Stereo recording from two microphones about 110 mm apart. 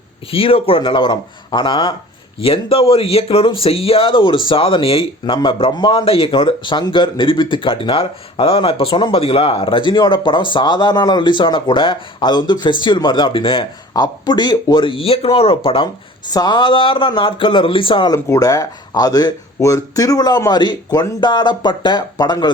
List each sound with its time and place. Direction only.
0.3 s speech: 60° left (ahead or behind)
2.4 s speech: 60° left (ahead or behind)
13.9 s speech: 40° left (ahead or behind); by 15.9 s 55° left (ahead or behind)
16.3 s speech: 40° left (ahead or behind)
18.1 s speech: 30° left (ahead or behind)